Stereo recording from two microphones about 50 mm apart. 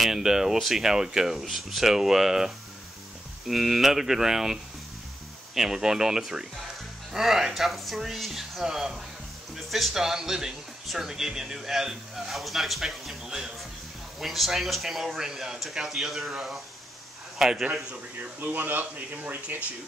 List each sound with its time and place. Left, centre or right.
0.0 s speech: centre
17.4 s a man's voice: centre
18.4 s speech: right